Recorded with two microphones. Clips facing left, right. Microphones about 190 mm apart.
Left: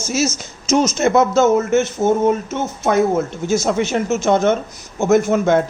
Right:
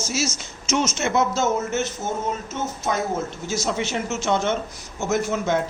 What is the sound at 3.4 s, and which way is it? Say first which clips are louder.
Speech: left 8 dB; 50° left (ahead or behind).